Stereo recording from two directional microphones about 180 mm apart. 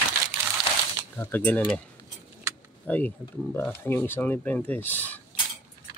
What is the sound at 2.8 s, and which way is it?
Speech, 10° left (ahead or behind).